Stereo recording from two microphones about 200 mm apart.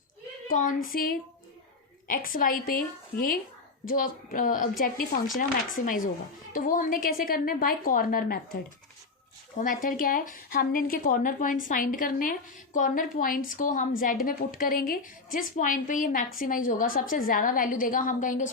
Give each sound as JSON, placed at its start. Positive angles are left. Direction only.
{"t": 0.5, "sound": "speech", "side_deg": 40}